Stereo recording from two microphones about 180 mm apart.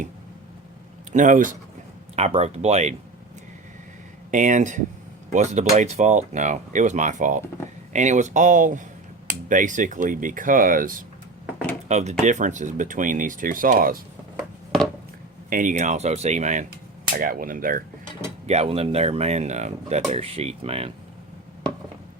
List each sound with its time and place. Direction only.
1.1 s speech: 45° right (ahead or behind)
2.1 s speech: 35° right (ahead or behind)
4.3 s speech: 45° right (ahead or behind)
11.9 s speech: 40° right (ahead or behind)
15.4 s speech: 50° right (ahead or behind)
18.4 s speech: 35° right (ahead or behind)